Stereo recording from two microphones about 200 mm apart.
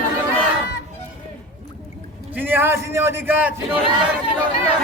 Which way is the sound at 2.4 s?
10° right (ahead or behind).